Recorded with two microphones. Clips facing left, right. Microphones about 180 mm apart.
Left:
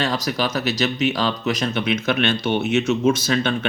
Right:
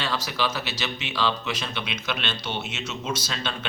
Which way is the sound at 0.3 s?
40° left (ahead or behind).